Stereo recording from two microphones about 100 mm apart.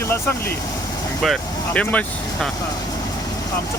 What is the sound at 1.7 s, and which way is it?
Speech, 15° left (ahead or behind).